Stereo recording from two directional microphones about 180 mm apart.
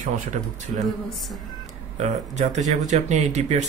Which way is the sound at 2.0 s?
40° right (ahead or behind).